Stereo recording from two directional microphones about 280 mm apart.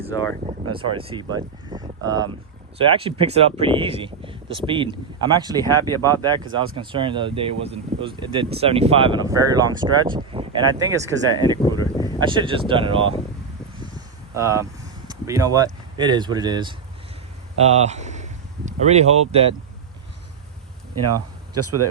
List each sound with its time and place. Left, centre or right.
0.1 s speech: centre
0.7 s speech: centre
5.6 s speech: centre
6.2 s speech: centre
11.8 s a sound: centre
12.2 s speech: centre
14.3 s speech: centre
21.1 s speech: right